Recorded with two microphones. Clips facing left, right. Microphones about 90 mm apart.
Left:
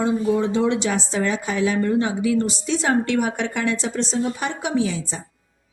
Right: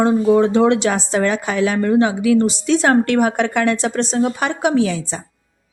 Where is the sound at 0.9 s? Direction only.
60° right (ahead or behind).